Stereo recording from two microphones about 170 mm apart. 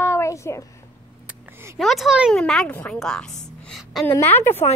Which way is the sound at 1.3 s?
15° right (ahead or behind).